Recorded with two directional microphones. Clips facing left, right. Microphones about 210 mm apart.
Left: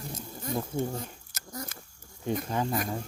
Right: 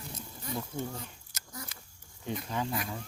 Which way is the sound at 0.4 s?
45° left (ahead or behind).